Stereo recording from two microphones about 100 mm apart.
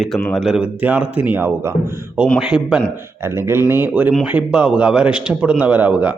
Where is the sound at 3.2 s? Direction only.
25° right (ahead or behind).